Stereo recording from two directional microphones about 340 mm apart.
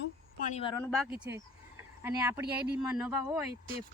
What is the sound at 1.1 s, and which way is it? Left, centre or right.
Speech, centre.